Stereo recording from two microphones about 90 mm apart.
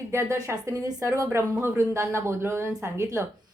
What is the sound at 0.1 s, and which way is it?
A woman's voice, 30° right (ahead or behind).